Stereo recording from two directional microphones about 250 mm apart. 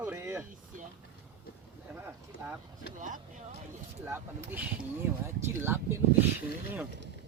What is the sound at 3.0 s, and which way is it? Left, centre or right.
Speech, right.